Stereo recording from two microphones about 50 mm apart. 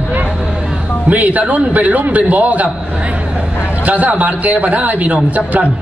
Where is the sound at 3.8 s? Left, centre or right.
Right.